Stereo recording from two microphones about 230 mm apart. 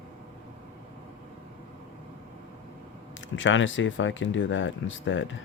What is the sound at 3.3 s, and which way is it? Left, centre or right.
Speech, left.